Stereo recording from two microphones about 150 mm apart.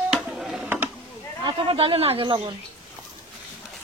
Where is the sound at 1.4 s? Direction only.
35° right (ahead or behind).